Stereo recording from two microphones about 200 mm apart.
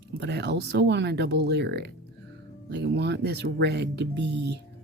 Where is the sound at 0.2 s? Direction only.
60° right (ahead or behind).